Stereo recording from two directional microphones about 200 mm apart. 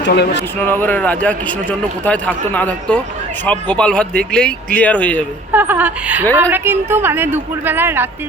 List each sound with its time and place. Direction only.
0.0 s speech: 55° left (ahead or behind)
0.6 s a man's voice: 10° left (ahead or behind)
5.5 s speech: 10° right (ahead or behind)